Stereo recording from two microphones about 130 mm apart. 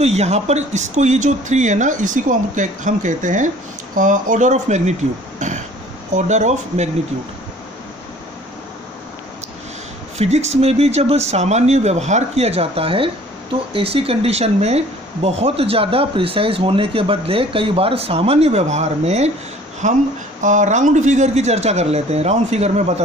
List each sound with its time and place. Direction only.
0.0 s speech: 55° right (ahead or behind)
10.1 s speech: 55° right (ahead or behind)
19.8 s speech: 70° right (ahead or behind)